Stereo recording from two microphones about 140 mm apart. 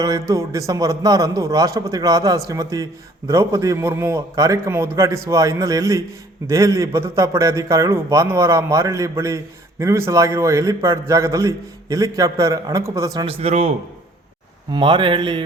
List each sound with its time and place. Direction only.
0.0 s a man's voice: 25° right (ahead or behind)
13.2 s a man's voice: 50° right (ahead or behind)
14.7 s speech: 35° right (ahead or behind)